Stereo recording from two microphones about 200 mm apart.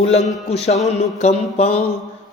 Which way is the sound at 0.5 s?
35° left (ahead or behind).